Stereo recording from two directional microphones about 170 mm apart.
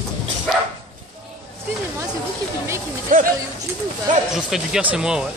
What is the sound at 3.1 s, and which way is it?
Speech, 50° right (ahead or behind).